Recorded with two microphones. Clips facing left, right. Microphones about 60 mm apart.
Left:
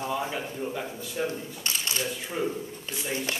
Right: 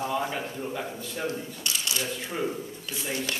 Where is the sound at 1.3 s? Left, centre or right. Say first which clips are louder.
Right 1 dB; left.